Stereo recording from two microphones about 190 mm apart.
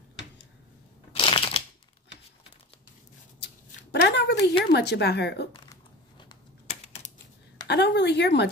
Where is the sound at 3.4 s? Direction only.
60° left (ahead or behind).